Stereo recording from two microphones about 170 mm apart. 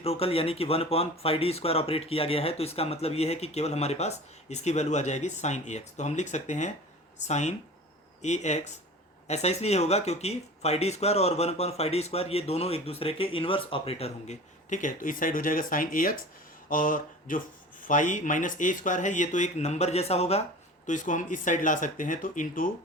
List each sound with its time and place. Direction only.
0.0 s speech: 35° left (ahead or behind); by 16.1 s 55° left (ahead or behind)
16.6 s a sound: 55° left (ahead or behind)
17.8 s speech: 50° left (ahead or behind)
20.8 s speech: 50° left (ahead or behind)